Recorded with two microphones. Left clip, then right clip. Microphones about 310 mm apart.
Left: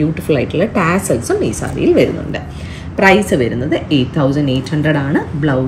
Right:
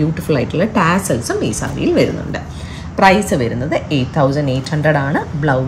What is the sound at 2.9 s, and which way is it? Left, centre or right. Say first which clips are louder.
A woman's voice: left 1 dB; right.